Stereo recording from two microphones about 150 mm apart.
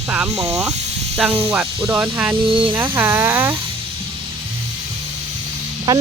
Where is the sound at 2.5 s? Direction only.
35° right (ahead or behind).